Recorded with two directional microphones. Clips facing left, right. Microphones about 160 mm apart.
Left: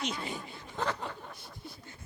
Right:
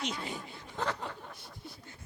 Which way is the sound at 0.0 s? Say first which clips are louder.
Left 1 dB; 10° left (ahead or behind).